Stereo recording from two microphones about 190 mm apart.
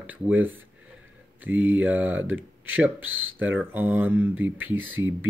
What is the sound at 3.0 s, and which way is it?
Speech, 90° right.